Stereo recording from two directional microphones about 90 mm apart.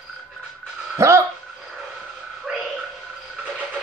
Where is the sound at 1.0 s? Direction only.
35° right (ahead or behind).